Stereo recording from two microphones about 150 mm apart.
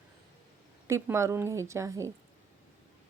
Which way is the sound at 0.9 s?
20° right (ahead or behind).